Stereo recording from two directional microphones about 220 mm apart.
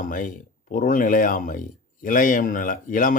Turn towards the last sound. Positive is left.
turn(degrees=40)  # may be behind; listen again after turning